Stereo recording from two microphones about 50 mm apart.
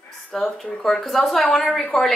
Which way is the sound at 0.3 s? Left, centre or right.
Centre.